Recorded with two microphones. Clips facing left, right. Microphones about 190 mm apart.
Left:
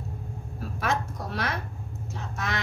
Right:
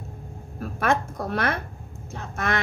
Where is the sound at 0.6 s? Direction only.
55° right (ahead or behind).